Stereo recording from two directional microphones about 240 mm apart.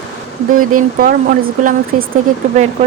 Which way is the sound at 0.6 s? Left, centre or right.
Right.